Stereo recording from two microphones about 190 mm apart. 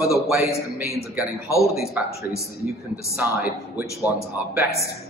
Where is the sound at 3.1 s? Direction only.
5° right (ahead or behind).